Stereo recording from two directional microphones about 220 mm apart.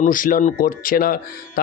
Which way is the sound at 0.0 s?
35° left (ahead or behind).